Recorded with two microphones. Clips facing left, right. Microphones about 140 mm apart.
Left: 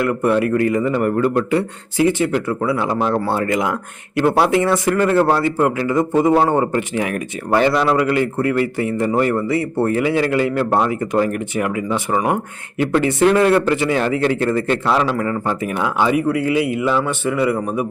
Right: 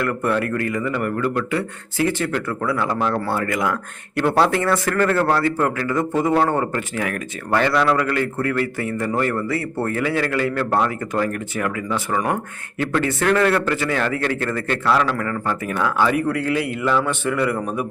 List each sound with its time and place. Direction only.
0.0 s speech: 15° left (ahead or behind)